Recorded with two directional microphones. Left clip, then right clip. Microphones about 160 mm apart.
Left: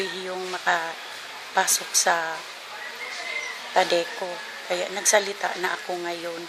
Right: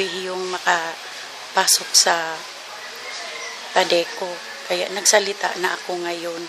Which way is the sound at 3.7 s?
15° right (ahead or behind).